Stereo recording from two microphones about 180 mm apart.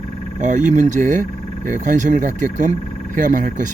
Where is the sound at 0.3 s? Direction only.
45° right (ahead or behind).